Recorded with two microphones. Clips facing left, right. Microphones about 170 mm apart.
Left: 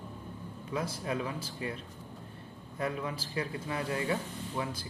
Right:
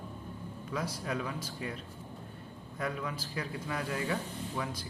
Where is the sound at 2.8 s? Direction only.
30° left (ahead or behind).